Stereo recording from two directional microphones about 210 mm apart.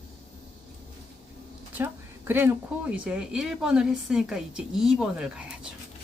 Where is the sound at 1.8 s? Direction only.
10° right (ahead or behind).